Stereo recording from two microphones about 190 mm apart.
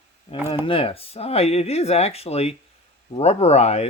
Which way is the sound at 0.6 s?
30° left (ahead or behind).